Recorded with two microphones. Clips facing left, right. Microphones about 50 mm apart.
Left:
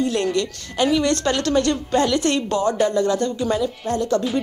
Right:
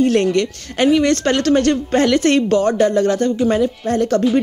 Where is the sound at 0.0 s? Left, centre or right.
Right.